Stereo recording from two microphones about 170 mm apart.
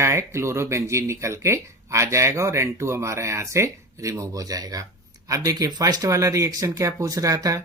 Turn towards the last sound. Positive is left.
turn(degrees=-20)  # may be behind; listen again after turning